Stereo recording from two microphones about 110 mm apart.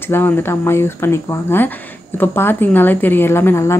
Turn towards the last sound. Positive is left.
turn(degrees=25)  # may be behind; listen again after turning